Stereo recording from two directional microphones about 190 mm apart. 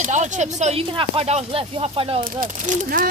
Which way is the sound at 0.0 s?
40° right (ahead or behind).